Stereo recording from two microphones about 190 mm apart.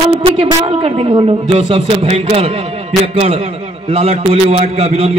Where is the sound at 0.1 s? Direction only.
30° right (ahead or behind).